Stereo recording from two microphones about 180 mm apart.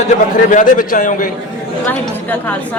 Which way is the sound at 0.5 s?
45° left (ahead or behind).